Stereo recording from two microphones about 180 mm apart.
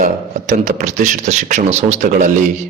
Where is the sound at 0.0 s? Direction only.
45° right (ahead or behind).